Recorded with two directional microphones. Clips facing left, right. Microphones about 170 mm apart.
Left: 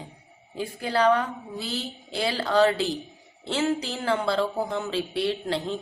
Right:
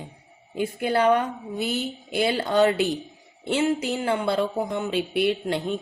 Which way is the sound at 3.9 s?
20° right (ahead or behind).